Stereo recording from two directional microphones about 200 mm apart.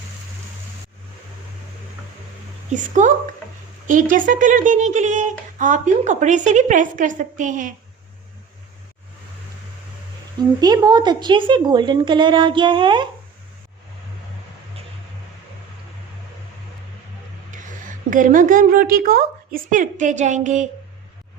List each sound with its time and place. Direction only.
2.7 s speech: 40° right (ahead or behind)
10.6 s a woman's voice: 20° right (ahead or behind)
18.1 s speech: 40° right (ahead or behind)